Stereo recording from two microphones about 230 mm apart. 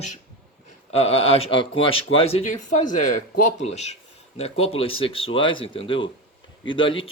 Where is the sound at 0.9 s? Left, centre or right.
Left.